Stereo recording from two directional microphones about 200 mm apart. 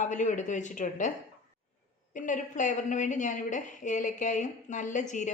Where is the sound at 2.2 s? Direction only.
40° left (ahead or behind).